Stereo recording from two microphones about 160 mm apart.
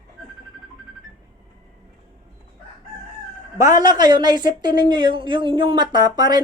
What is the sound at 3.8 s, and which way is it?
A woman's voice, 25° right (ahead or behind).